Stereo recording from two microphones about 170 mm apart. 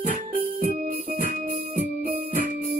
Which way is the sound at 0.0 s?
55° right (ahead or behind).